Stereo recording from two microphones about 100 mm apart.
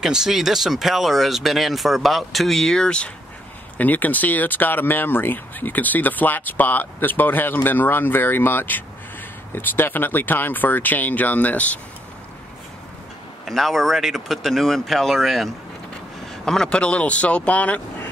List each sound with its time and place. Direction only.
0.0 s speech: 5° right (ahead or behind); by 11.8 s 15° left (ahead or behind)
13.5 s speech: centre (ahead or behind)